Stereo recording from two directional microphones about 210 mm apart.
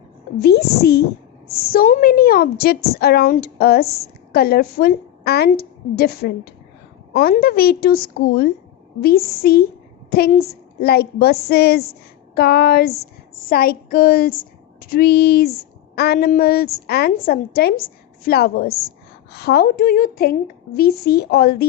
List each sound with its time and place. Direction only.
0.3 s a woman's voice: 50° left (ahead or behind)